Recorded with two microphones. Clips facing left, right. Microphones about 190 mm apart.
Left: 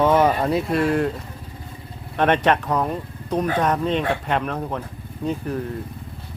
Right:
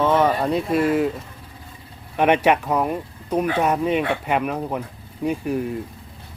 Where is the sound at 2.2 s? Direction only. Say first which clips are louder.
Right 1 dB; 10° right (ahead or behind).